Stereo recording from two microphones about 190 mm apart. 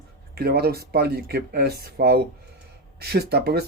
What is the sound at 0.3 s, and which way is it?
Speech, 55° right (ahead or behind).